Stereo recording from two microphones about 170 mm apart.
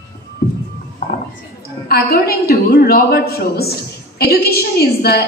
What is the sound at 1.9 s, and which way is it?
A woman's voice, 65° left (ahead or behind).